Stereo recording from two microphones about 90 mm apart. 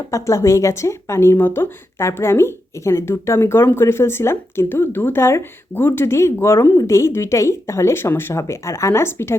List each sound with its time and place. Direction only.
0.1 s a woman's voice: 35° left (ahead or behind)